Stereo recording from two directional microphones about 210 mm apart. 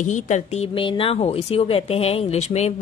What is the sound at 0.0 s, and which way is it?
Speech, 35° left (ahead or behind).